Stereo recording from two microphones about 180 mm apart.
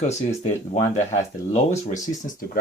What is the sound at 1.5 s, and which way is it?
Speech, 40° left (ahead or behind).